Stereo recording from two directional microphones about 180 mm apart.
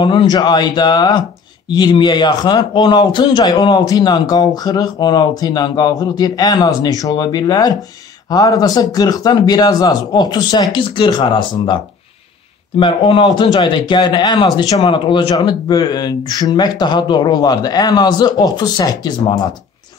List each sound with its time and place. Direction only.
0.0 s speech: 25° left (ahead or behind)